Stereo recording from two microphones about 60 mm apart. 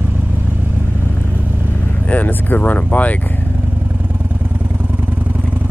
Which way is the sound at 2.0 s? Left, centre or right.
Left.